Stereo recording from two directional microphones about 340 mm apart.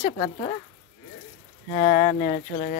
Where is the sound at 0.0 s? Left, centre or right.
Left.